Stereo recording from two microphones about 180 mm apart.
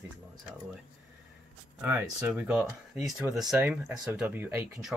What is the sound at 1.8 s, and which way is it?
Speech, 10° right (ahead or behind).